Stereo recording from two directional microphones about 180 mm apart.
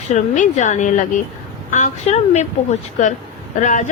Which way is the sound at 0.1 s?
40° left (ahead or behind).